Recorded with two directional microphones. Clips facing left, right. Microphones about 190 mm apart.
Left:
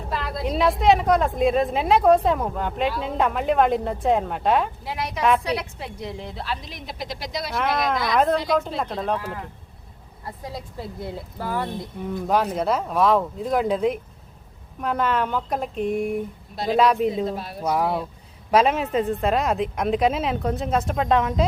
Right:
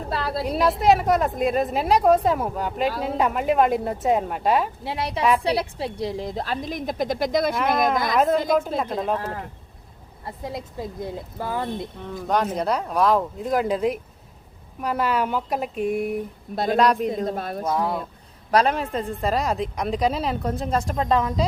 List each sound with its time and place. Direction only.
0.1 s a sound: 35° right (ahead or behind)
0.4 s a woman's voice: centre (ahead or behind)
4.8 s a woman's voice: 30° right (ahead or behind); by 7.5 s 50° right (ahead or behind)
7.5 s a woman's voice: centre (ahead or behind)
10.2 s speech: 25° right (ahead or behind)
12.0 s a woman's voice: 5° left (ahead or behind)
17.3 s a woman's voice: 50° right (ahead or behind)
17.7 s a woman's voice: 10° left (ahead or behind)